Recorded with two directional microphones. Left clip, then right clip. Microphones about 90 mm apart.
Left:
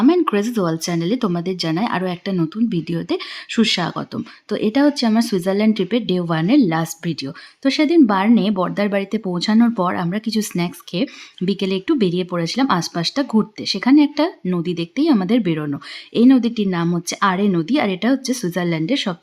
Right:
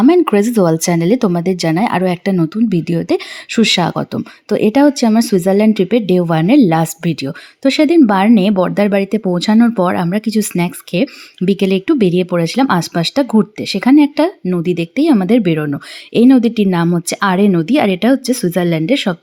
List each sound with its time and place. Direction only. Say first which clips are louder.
0.1 s speech: right 6 dB; 50° right (ahead or behind)
2.3 s speech: right 6 dB; 35° right (ahead or behind)